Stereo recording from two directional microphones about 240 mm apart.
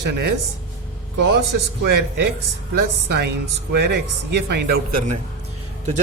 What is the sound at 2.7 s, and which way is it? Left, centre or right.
Speech, right.